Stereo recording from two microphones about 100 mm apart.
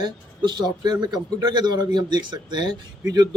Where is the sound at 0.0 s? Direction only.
45° right (ahead or behind).